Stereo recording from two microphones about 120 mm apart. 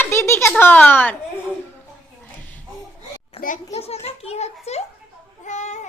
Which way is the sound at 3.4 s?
55° left (ahead or behind).